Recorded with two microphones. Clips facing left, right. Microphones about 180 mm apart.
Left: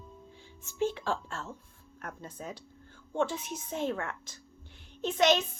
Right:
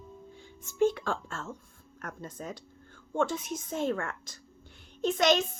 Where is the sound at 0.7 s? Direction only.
50° right (ahead or behind).